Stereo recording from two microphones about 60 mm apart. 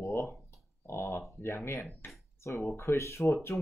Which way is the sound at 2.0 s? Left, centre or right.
Left.